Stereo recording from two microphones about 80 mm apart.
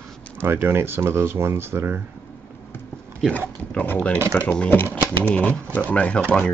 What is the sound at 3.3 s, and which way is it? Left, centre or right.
Speech, centre.